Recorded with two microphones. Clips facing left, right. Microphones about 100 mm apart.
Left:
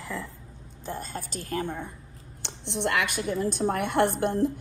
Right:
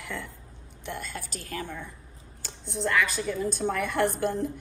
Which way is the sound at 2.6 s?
65° left (ahead or behind).